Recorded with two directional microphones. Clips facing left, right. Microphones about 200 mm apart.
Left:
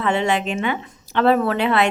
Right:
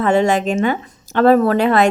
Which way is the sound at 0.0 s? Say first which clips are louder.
Right 5 dB; 45° right (ahead or behind).